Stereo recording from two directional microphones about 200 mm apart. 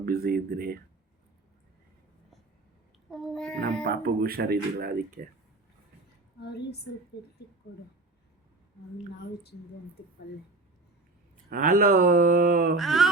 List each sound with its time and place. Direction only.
0.0 s speech: 50° right (ahead or behind)
3.1 s speech: centre (ahead or behind)
3.8 s speech: 50° right (ahead or behind)
6.4 s a woman's voice: 55° left (ahead or behind)
11.4 s speech: 45° right (ahead or behind)
12.7 s speech: centre (ahead or behind)